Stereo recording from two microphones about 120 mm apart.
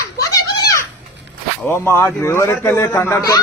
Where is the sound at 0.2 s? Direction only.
30° left (ahead or behind).